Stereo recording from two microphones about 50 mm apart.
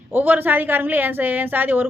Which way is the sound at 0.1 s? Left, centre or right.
Right.